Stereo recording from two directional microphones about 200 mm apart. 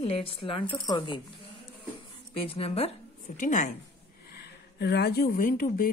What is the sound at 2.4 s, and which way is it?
A woman's voice, 30° left (ahead or behind).